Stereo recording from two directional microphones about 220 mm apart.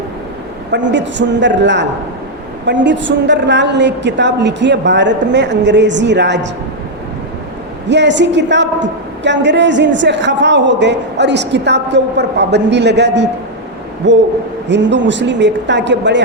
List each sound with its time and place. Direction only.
0.7 s a woman's voice: 55° right (ahead or behind)
7.9 s a woman's voice: 55° right (ahead or behind)